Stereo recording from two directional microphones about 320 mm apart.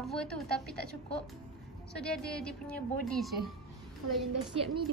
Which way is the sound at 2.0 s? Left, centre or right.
Centre.